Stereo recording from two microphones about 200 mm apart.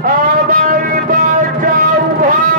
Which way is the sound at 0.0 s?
45° right (ahead or behind).